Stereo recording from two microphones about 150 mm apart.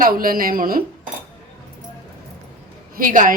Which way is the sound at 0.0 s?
70° right (ahead or behind).